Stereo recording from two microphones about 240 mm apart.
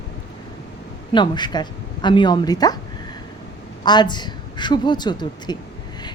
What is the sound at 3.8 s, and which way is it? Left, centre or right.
A woman's voice, centre.